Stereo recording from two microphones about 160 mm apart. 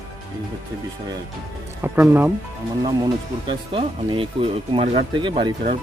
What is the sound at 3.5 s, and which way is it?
Speech, 30° right (ahead or behind).